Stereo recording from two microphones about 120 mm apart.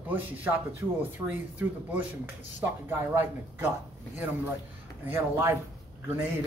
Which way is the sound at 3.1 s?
15° right (ahead or behind).